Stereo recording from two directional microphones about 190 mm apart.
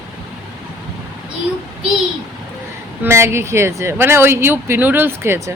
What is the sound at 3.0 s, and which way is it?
Speech, 15° right (ahead or behind).